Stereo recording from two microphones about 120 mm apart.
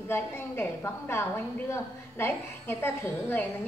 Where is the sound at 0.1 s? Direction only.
20° left (ahead or behind).